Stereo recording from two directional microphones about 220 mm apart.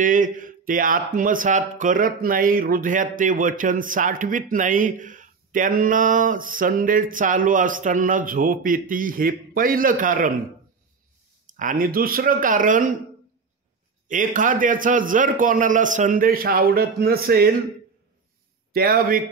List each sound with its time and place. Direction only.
0.0 s speech: 35° right (ahead or behind)
11.4 s speech: 35° right (ahead or behind)
14.0 s speech: 35° right (ahead or behind)
18.7 s speech: 45° right (ahead or behind)